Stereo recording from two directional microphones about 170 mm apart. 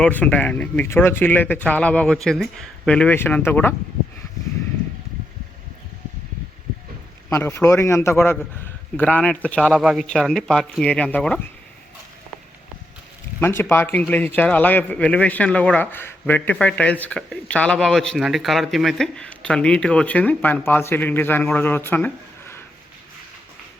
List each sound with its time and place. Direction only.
0.0 s speech: 10° left (ahead or behind)
7.3 s speech: 15° left (ahead or behind)
13.4 s speech: 15° left (ahead or behind)